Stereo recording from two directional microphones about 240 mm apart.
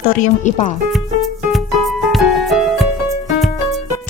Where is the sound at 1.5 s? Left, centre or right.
Centre.